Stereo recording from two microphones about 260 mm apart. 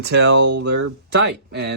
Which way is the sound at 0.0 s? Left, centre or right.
Right.